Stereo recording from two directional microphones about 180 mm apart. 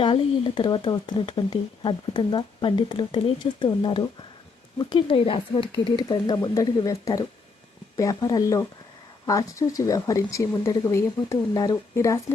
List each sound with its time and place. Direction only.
0.0 s speech: 25° left (ahead or behind)